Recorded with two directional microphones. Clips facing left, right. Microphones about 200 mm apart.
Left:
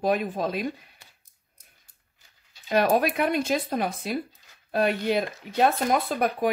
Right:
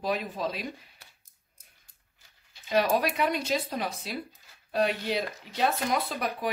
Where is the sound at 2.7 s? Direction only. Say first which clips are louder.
Left 3 dB; 55° left (ahead or behind).